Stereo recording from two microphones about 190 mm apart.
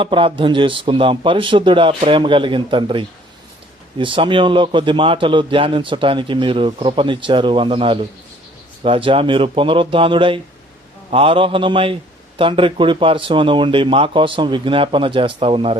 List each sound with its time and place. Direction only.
0.0 s a man's voice: 25° right (ahead or behind)